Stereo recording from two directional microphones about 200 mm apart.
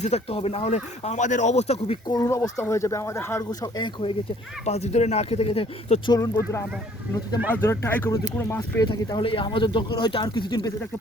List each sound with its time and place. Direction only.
0.0 s speech: 30° left (ahead or behind)
4.6 s speech: 30° left (ahead or behind)
6.1 s speech: 15° left (ahead or behind)
7.5 s speech: 15° left (ahead or behind)
8.9 s speech: 20° left (ahead or behind)